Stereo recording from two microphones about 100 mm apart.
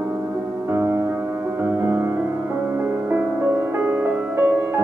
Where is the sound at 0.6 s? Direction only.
25° right (ahead or behind).